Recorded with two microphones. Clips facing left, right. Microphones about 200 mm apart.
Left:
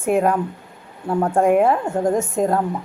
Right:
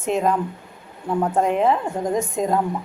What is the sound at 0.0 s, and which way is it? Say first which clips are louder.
Speech: left 3 dB; 10° left (ahead or behind).